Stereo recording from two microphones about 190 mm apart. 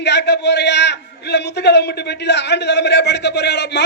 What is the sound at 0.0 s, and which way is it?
A man's voice, 60° left (ahead or behind).